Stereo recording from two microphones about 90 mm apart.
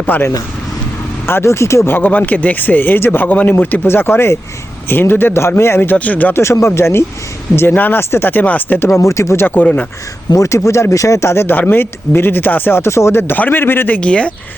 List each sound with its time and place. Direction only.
0.2 s speech: 30° left (ahead or behind)
6.4 s speech: 35° left (ahead or behind)
8.9 s speech: 35° left (ahead or behind)
10.2 s speech: 35° left (ahead or behind); by 14.3 s 10° left (ahead or behind)